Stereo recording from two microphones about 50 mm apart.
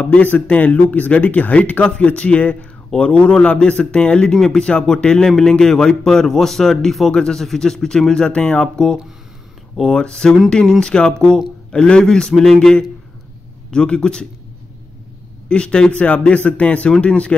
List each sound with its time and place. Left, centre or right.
0.0 s speech: left; by 12.5 s centre
13.7 s speech: centre
15.4 s speech: centre